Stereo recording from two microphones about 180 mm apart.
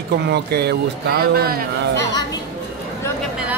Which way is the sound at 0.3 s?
65° right (ahead or behind).